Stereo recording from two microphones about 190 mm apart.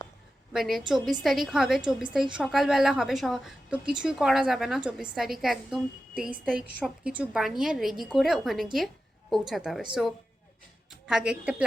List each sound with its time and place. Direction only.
0.5 s a woman's voice: centre (ahead or behind)
11.0 s a woman's voice: 5° right (ahead or behind)